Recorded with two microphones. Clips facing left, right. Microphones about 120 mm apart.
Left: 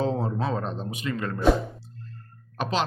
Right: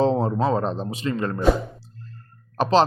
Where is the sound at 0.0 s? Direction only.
35° right (ahead or behind).